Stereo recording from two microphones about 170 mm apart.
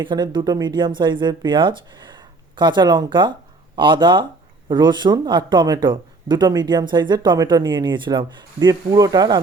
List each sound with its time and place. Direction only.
0.0 s speech: 25° right (ahead or behind)